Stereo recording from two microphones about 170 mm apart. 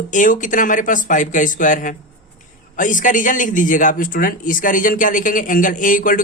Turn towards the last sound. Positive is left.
turn(degrees=55)  # may be behind; listen again after turning